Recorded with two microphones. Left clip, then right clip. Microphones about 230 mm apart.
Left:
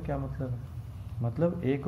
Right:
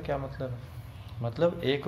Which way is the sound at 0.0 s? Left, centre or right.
Centre.